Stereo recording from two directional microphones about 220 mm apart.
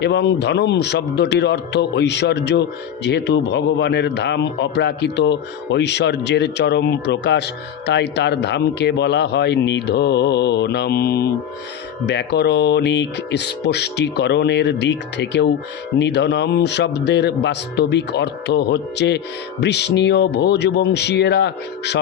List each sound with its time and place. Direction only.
0.0 s a man's voice: 50° left (ahead or behind)